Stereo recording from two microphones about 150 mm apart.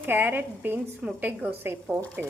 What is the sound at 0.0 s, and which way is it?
A woman's voice, 15° right (ahead or behind).